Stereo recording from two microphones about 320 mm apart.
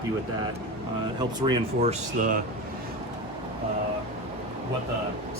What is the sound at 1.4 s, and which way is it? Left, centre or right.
Speech, centre.